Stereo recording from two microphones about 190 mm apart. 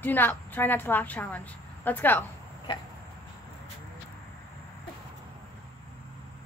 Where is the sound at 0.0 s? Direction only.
10° left (ahead or behind).